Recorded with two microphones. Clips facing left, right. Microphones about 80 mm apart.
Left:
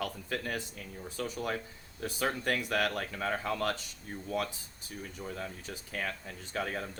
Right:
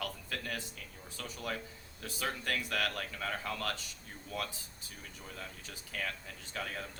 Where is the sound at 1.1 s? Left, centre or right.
Left.